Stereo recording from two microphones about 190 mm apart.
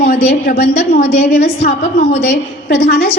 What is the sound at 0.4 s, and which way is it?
A woman's voice, 50° left (ahead or behind).